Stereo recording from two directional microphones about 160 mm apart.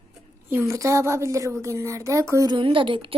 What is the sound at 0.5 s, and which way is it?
A woman's voice, 20° right (ahead or behind).